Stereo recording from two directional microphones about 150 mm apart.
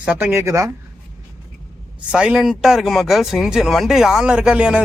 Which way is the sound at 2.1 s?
5° right (ahead or behind).